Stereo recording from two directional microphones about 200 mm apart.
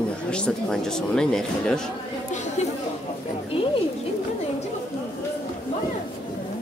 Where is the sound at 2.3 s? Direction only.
35° left (ahead or behind).